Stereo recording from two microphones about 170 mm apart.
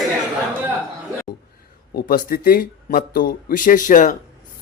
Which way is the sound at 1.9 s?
60° left (ahead or behind).